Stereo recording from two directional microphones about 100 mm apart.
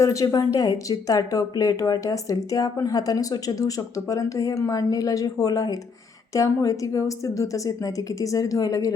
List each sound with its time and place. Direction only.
0.0 s speech: 30° left (ahead or behind)